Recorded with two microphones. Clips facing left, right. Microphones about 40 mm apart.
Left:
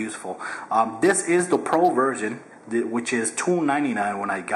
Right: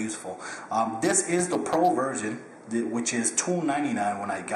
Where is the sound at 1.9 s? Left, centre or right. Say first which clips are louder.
Left 5 dB; centre.